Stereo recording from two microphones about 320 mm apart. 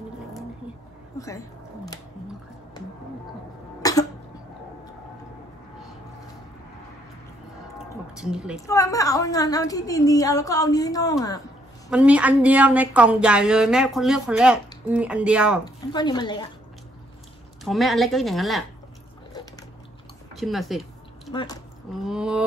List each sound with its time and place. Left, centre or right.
1.1 s a sound: centre
3.8 s cough: centre
8.2 s speech: centre
8.5 s a woman's voice: centre
11.9 s speech: centre
15.6 s a woman's voice: centre
17.6 s speech: centre
20.3 s speech: centre
21.3 s speech: centre
22.0 s speech: centre